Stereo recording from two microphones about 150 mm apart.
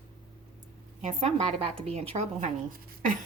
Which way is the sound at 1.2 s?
45° right (ahead or behind).